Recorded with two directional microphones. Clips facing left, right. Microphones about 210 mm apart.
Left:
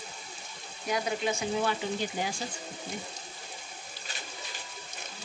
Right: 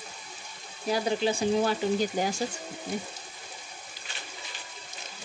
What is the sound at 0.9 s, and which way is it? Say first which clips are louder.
Frying: right 4 dB; 30° right (ahead or behind).